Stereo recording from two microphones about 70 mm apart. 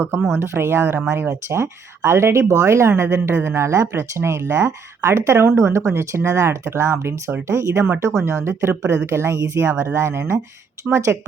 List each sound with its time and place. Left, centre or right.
0.3 s a woman's voice: right